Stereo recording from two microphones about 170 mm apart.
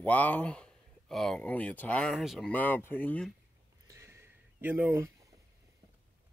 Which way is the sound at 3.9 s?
15° right (ahead or behind).